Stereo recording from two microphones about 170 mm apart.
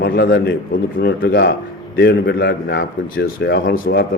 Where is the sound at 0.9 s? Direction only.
65° left (ahead or behind).